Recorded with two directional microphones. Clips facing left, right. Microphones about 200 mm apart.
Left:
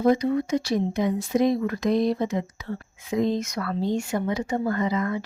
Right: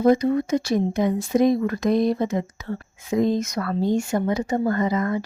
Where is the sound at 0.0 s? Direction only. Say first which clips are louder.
Right 3 dB; 50° right (ahead or behind).